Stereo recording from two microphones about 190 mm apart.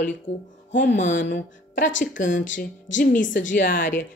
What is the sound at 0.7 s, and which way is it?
Speech, 70° left (ahead or behind).